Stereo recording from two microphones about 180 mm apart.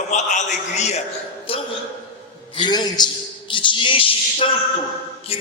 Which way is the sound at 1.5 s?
30° left (ahead or behind).